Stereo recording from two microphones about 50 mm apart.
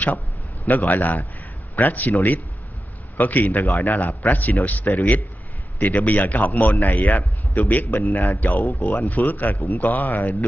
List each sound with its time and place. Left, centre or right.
0.7 s a man's voice: left